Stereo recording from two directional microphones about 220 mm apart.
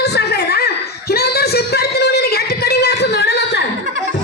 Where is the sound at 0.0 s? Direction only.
50° left (ahead or behind).